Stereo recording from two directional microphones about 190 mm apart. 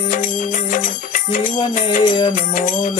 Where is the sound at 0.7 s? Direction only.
45° left (ahead or behind).